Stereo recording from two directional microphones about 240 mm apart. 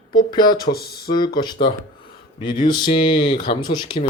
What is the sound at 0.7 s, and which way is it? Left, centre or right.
Speech, left.